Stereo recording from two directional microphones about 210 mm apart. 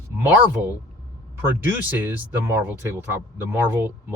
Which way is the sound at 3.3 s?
10° right (ahead or behind).